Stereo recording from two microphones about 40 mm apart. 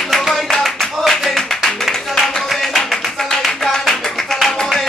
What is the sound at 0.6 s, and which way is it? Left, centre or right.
Music, centre.